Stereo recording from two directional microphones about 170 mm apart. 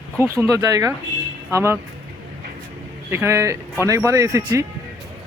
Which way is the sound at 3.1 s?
15° right (ahead or behind).